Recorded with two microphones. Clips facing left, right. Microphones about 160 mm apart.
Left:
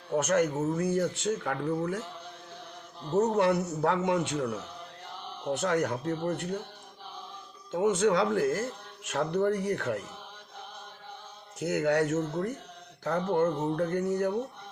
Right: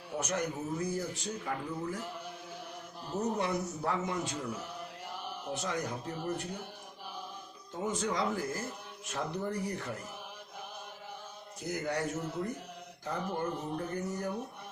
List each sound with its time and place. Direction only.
0.2 s a man's voice: 75° left (ahead or behind)
3.2 s a man's voice: 70° left (ahead or behind)
5.6 s a man's voice: 70° left (ahead or behind)
7.7 s a man's voice: 80° left
11.6 s a man's voice: 70° left (ahead or behind)